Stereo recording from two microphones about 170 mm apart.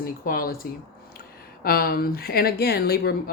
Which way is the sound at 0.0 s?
60° left (ahead or behind).